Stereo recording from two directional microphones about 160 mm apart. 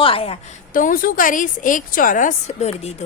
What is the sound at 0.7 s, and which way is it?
A woman's voice, 55° left (ahead or behind).